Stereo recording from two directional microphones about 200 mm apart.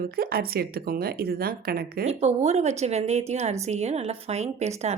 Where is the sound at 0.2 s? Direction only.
50° right (ahead or behind).